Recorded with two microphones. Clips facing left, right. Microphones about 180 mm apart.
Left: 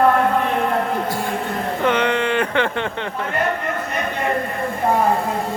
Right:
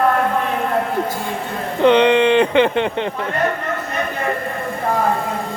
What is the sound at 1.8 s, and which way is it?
Speech, 20° right (ahead or behind).